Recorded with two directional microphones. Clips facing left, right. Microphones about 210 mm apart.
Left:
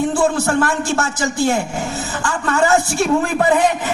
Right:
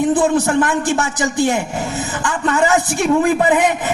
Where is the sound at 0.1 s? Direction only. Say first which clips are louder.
Right 2 dB; 20° right (ahead or behind).